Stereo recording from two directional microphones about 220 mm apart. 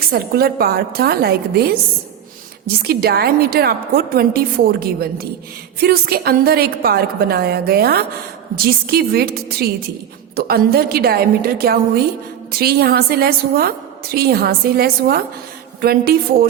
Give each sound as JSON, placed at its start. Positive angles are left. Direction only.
{"t": 0.0, "sound": "a woman's voice", "side_deg": -45}